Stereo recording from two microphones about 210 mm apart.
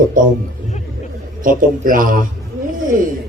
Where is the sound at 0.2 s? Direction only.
40° right (ahead or behind).